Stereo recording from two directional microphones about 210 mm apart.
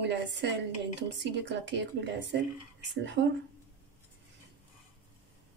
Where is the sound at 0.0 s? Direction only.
55° right (ahead or behind).